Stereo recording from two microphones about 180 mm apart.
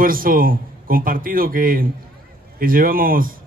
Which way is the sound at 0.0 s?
50° right (ahead or behind).